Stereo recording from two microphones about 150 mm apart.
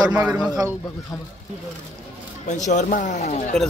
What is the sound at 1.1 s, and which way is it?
Speech, 25° left (ahead or behind).